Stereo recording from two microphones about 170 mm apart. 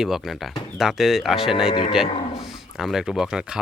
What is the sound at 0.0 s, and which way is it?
Speech, centre (ahead or behind).